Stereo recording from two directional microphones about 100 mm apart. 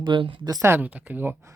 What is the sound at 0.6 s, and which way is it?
Speech, 20° right (ahead or behind).